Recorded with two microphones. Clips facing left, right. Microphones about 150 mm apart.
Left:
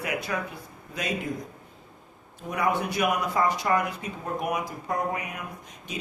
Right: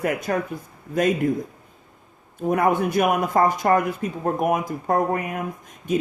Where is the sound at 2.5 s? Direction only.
50° right (ahead or behind).